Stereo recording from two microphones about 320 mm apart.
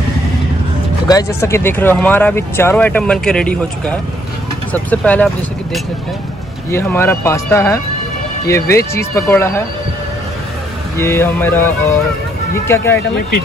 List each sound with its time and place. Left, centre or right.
1.0 s speech: centre
11.0 s speech: centre